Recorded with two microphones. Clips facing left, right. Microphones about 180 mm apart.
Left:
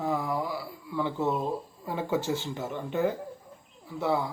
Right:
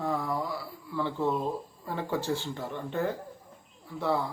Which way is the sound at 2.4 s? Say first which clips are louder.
Left 2 dB; 20° left (ahead or behind).